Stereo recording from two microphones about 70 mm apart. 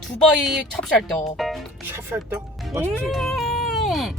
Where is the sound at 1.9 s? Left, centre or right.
Right.